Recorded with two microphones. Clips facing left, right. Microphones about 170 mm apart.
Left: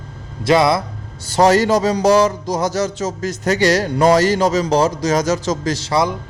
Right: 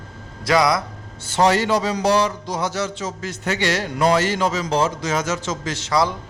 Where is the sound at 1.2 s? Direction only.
40° left (ahead or behind).